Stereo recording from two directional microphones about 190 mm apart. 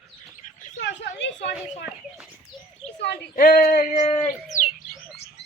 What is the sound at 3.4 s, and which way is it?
Male singing, 45° left (ahead or behind).